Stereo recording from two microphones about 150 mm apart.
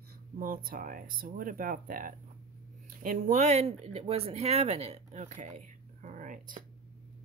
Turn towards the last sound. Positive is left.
turn(degrees=-60)  # may be behind; listen again after turning